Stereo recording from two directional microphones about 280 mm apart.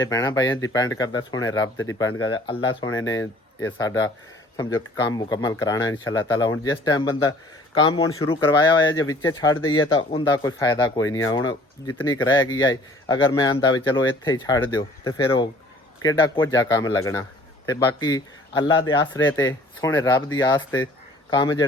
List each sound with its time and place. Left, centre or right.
0.0 s a man's voice: centre